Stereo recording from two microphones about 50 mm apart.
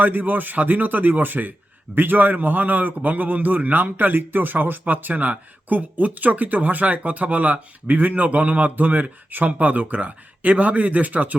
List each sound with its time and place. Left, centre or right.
0.0 s a man's voice: right